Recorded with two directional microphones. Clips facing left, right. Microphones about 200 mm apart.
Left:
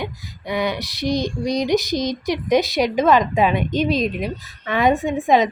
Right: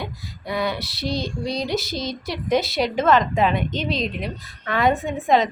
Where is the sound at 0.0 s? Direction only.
20° left (ahead or behind).